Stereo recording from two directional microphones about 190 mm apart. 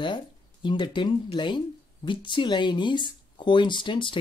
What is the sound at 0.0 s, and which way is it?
Speech, 25° left (ahead or behind).